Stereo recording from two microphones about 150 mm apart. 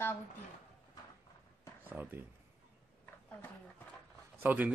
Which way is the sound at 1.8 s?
10° right (ahead or behind).